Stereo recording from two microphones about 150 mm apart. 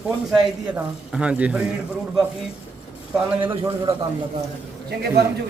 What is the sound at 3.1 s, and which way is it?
Speech, 15° right (ahead or behind).